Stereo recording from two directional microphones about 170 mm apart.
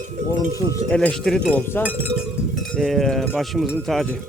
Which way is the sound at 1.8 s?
10° right (ahead or behind).